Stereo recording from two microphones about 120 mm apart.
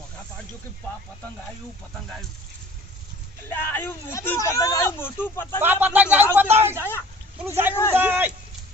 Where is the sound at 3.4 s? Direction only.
20° left (ahead or behind).